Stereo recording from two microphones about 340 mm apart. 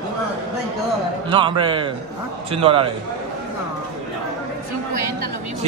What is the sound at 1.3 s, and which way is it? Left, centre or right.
A man's voice, centre.